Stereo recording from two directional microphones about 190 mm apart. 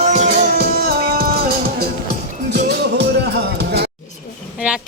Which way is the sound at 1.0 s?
55° right (ahead or behind).